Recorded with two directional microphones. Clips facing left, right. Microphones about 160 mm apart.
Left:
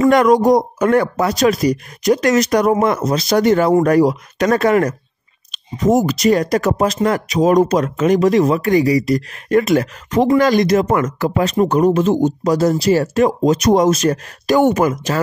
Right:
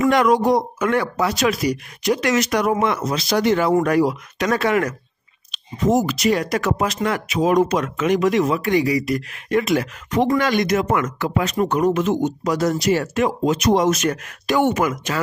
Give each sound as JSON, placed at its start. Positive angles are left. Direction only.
{"t": 0.1, "sound": "speech", "side_deg": 45}